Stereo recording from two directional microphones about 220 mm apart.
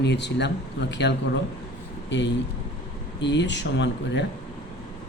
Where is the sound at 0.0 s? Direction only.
50° left (ahead or behind).